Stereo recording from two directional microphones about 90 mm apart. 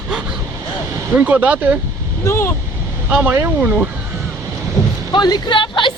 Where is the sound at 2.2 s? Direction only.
30° left (ahead or behind).